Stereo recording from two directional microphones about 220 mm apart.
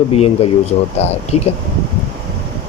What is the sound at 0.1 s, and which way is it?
Speech, 25° left (ahead or behind).